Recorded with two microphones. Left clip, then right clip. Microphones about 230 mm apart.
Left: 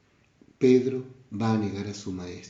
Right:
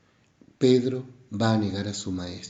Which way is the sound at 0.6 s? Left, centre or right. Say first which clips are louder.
Even; right.